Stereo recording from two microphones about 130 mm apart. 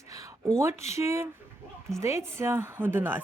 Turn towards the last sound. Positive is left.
turn(degrees=-15)  # may be behind; listen again after turning